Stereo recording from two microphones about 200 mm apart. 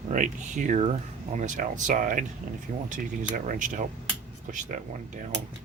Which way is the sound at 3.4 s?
40° right (ahead or behind).